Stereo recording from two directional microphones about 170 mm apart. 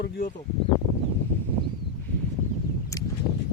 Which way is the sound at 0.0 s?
55° left (ahead or behind).